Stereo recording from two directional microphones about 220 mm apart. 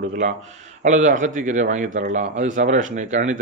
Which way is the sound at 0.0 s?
35° right (ahead or behind).